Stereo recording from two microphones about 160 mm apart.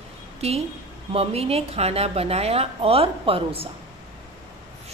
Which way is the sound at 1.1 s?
40° right (ahead or behind).